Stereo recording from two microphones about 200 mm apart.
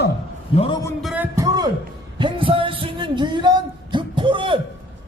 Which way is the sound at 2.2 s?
25° right (ahead or behind).